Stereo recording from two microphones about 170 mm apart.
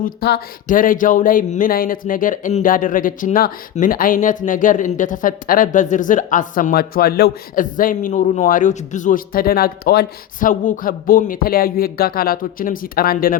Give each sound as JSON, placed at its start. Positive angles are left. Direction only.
{"t": 0.0, "sound": "speech", "side_deg": 65}
{"t": 10.5, "sound": "speech", "side_deg": 45}